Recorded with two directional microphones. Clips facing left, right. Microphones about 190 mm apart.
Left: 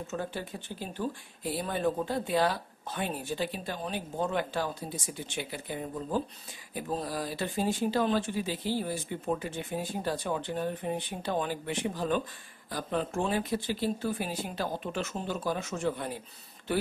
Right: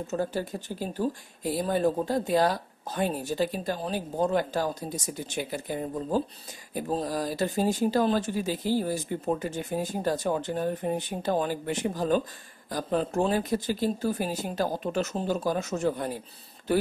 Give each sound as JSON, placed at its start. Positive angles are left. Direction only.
{"t": 0.0, "sound": "speech", "side_deg": -40}